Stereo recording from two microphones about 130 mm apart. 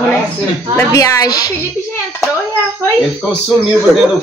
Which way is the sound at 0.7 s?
25° left (ahead or behind).